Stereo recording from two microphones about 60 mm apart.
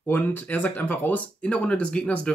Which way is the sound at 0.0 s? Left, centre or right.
Left.